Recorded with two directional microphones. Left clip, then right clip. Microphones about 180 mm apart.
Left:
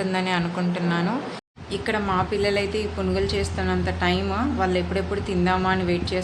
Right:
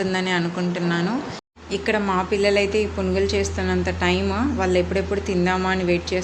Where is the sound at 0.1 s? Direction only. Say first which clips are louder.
Right 2 dB; 10° right (ahead or behind).